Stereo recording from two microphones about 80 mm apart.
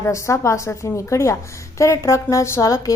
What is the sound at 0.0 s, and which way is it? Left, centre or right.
A woman's voice, left.